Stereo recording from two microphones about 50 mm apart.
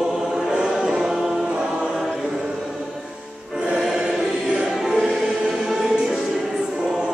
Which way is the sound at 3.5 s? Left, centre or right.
Centre.